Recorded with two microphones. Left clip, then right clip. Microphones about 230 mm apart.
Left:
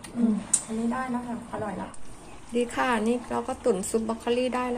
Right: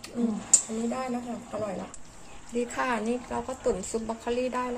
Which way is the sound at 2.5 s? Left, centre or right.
Centre.